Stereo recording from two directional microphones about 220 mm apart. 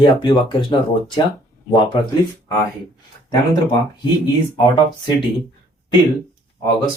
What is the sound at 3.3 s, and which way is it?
Speech, 20° left (ahead or behind).